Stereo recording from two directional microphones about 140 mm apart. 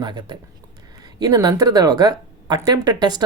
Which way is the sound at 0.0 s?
30° right (ahead or behind).